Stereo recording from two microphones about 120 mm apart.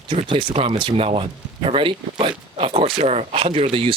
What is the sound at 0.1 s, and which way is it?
Speech, 45° right (ahead or behind).